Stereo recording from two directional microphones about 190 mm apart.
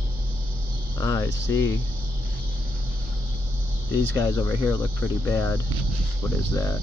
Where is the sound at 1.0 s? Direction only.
15° left (ahead or behind).